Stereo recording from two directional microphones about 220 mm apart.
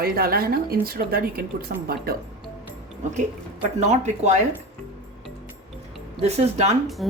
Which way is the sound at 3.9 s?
30° right (ahead or behind).